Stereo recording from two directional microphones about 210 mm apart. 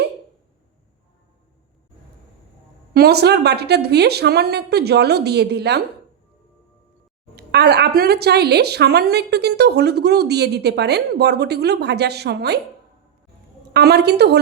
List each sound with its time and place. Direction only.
2.9 s a woman's voice: 50° right (ahead or behind)
7.3 s a woman's voice: 50° right (ahead or behind)
13.7 s a woman's voice: 50° right (ahead or behind)